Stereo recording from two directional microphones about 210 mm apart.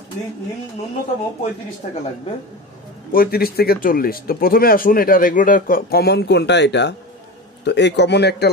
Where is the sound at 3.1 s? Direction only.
45° left (ahead or behind).